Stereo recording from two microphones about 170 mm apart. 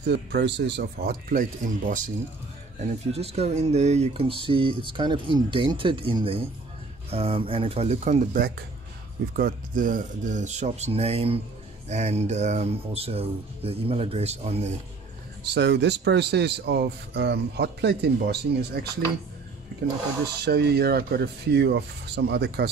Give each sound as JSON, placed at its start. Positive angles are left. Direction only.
{"t": 0.0, "sound": "speech", "side_deg": -75}
{"t": 2.8, "sound": "speech", "side_deg": -40}
{"t": 15.5, "sound": "speech", "side_deg": -85}
{"t": 20.3, "sound": "speech", "side_deg": -70}